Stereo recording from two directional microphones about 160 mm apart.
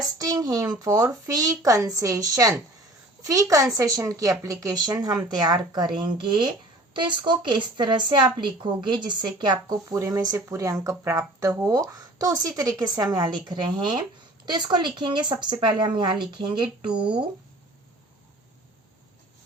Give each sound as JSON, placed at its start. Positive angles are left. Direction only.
{"t": 0.2, "sound": "speech", "side_deg": -25}